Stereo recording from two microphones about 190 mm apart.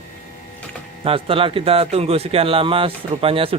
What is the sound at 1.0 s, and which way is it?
Speech, 30° right (ahead or behind).